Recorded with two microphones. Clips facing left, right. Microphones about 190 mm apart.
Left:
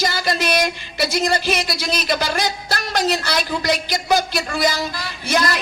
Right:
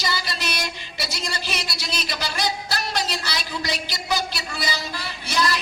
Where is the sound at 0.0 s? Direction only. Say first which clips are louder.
Left 7 dB; 50° left (ahead or behind).